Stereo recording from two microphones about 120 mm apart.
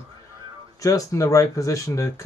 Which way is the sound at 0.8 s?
25° left (ahead or behind).